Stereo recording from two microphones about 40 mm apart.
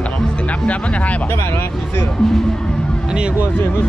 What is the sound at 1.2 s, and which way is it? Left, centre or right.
Vehicle, left.